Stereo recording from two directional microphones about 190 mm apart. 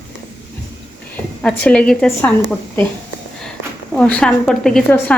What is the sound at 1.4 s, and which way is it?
Speech, 5° left (ahead or behind).